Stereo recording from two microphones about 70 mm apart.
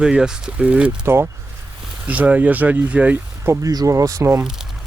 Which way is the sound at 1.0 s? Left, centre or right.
Right.